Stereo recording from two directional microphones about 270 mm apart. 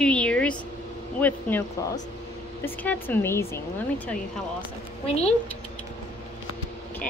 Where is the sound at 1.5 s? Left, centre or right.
Centre.